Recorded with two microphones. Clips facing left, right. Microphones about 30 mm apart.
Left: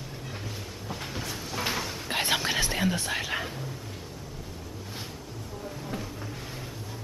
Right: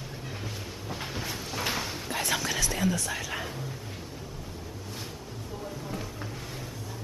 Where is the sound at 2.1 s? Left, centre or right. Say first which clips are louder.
Left 3 dB; left.